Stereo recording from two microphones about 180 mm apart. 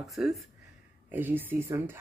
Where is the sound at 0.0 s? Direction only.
Centre (ahead or behind).